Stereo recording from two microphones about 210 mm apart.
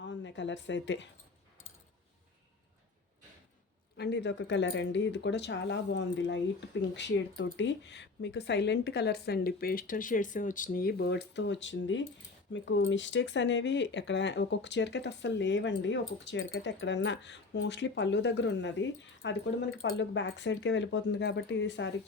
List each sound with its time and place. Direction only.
0.0 s a woman's voice: 60° left (ahead or behind)
3.9 s a woman's voice: 55° left (ahead or behind)